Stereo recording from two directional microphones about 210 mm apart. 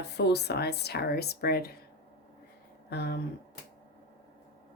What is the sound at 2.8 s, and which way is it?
Speech, 50° left (ahead or behind).